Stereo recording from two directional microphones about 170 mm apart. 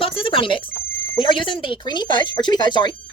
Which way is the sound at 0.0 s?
30° left (ahead or behind).